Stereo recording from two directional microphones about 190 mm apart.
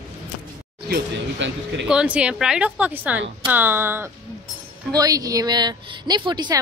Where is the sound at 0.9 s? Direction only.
70° right (ahead or behind).